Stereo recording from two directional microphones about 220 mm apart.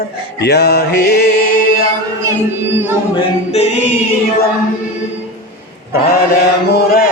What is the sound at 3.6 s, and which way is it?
Music, 30° left (ahead or behind).